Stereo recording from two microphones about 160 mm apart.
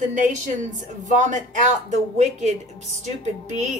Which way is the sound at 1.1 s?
50° right (ahead or behind).